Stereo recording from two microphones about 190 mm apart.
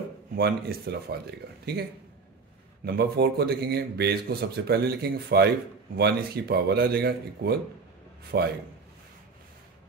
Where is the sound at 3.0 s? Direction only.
60° right (ahead or behind).